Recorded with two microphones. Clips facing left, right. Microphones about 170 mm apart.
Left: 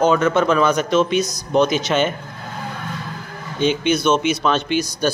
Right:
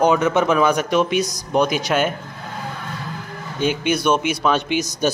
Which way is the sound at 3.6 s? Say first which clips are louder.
Left 2 dB; 10° right (ahead or behind).